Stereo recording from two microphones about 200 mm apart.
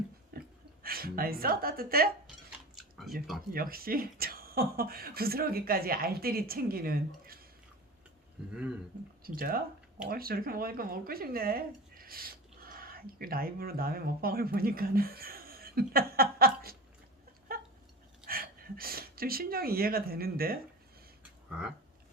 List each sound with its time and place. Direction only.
0.3 s a woman's voice: 50° right (ahead or behind)
3.5 s speech: 45° right (ahead or behind)
8.4 s speech: 5° right (ahead or behind)
9.2 s speech: 50° right (ahead or behind)
18.3 s speech: 45° right (ahead or behind)